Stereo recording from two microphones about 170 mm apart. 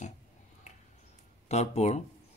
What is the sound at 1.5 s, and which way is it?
Speech, 40° left (ahead or behind).